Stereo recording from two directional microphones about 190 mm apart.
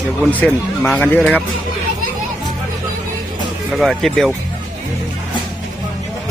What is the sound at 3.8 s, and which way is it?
Speech, centre (ahead or behind).